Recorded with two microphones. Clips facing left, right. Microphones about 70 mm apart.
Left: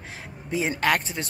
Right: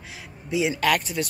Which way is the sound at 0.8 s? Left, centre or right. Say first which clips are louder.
Left 1 dB; left.